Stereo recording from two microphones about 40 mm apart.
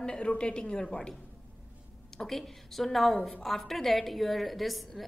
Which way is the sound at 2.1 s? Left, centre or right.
Centre.